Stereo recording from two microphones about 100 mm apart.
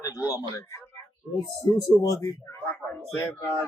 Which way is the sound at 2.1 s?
25° left (ahead or behind).